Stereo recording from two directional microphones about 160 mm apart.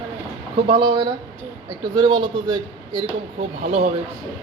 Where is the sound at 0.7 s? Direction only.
25° right (ahead or behind).